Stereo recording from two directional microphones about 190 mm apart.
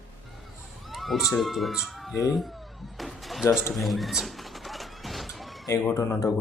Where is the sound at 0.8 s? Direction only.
Centre (ahead or behind).